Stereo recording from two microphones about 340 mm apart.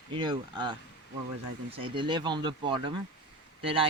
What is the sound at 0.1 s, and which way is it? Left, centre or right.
Speech, centre.